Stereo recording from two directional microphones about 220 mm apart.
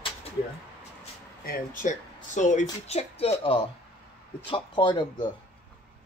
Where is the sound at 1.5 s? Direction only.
35° left (ahead or behind).